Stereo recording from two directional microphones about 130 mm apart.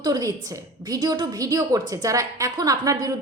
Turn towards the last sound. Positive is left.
turn(degrees=-30)  # may be behind; listen again after turning